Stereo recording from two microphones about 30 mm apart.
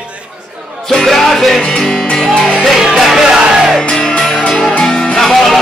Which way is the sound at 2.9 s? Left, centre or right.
Centre.